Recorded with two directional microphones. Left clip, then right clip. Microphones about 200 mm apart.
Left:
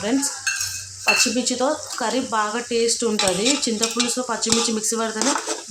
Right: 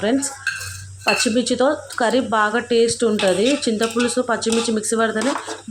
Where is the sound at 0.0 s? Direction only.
15° right (ahead or behind).